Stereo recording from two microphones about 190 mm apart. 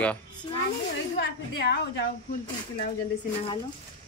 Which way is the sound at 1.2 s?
60° left (ahead or behind).